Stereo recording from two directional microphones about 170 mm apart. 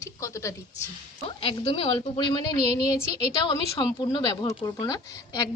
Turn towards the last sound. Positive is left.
turn(degrees=20)  # may be behind; listen again after turning